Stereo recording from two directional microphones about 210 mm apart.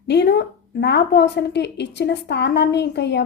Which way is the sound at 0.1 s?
50° left (ahead or behind).